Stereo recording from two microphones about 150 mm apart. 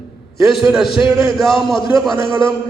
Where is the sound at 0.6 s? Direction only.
Centre (ahead or behind).